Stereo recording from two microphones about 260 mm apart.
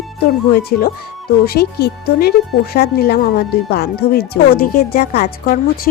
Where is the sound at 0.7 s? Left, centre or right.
Left.